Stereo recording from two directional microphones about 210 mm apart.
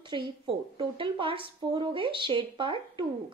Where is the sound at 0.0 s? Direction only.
25° right (ahead or behind).